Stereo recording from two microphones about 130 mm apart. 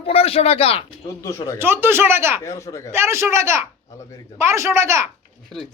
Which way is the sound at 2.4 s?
25° left (ahead or behind).